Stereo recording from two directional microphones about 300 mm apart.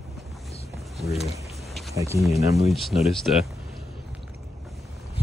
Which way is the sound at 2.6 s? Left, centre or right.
Centre.